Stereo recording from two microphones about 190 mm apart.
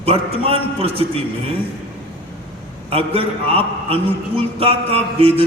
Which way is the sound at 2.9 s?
30° right (ahead or behind).